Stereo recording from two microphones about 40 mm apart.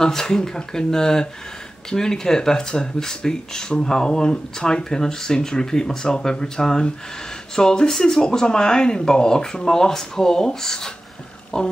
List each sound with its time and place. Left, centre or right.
0.0 s speech: centre